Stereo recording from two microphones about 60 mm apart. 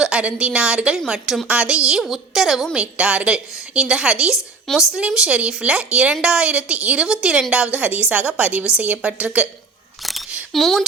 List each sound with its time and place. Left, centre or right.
0.0 s a woman's voice: centre
1.5 s a woman's voice: centre
2.8 s a woman's voice: centre
10.0 s single-lens reflex camera: centre
10.5 s speech: centre